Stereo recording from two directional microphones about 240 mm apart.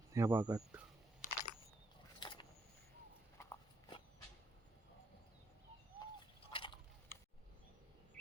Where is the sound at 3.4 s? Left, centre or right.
Centre.